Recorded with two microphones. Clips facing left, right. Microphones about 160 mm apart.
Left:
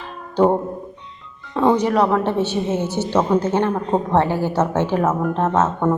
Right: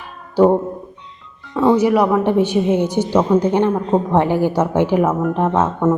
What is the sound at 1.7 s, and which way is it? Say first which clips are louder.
A woman's voice: right 5 dB; 10° right (ahead or behind).